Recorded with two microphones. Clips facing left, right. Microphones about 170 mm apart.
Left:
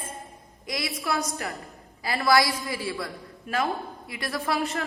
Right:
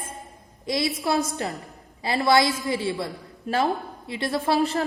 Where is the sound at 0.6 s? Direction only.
25° right (ahead or behind).